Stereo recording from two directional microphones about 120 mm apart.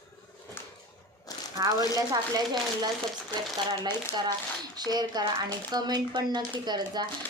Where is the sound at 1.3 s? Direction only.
30° left (ahead or behind).